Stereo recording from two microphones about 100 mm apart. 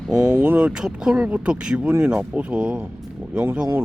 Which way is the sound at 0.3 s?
20° right (ahead or behind).